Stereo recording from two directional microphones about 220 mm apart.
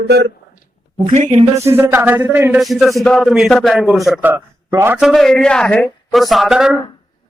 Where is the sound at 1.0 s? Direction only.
30° right (ahead or behind).